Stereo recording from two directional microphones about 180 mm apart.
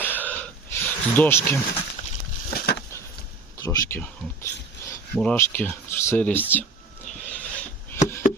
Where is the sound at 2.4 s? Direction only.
60° left (ahead or behind).